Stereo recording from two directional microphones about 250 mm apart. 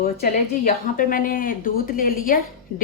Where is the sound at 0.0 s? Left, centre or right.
Left.